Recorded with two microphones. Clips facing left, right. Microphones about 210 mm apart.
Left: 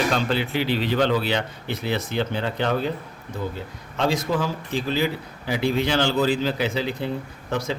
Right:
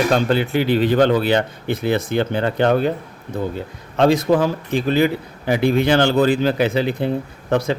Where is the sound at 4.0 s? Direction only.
60° right (ahead or behind).